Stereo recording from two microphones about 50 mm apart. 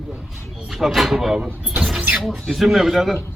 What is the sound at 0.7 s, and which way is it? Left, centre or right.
A man's voice, centre.